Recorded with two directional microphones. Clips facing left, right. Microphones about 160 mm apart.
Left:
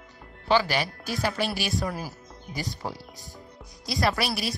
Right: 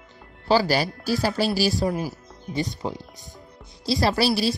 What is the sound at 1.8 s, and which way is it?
Speech, 20° right (ahead or behind).